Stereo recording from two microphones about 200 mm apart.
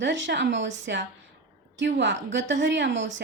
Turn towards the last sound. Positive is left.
turn(degrees=-65)  # may be behind; listen again after turning